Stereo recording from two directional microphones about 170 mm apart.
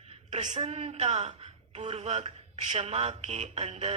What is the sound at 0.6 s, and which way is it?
A woman's voice, 35° right (ahead or behind).